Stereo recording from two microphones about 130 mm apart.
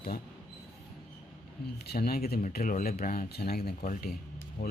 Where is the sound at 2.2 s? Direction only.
80° left.